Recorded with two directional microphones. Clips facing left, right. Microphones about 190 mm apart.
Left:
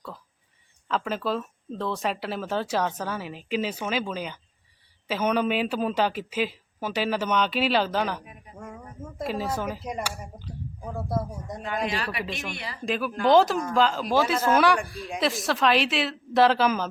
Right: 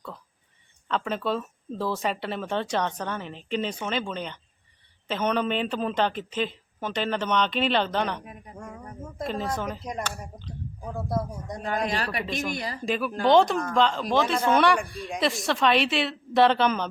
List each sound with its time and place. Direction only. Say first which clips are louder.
0.9 s a man's voice: even; centre (ahead or behind)
11.9 s a man's voice: right 1 dB; 40° right (ahead or behind)
12.2 s speech: right 3 dB; centre (ahead or behind)
12.5 s a man's voice: right 5 dB; 40° right (ahead or behind)
12.8 s speech: left 1 dB; centre (ahead or behind)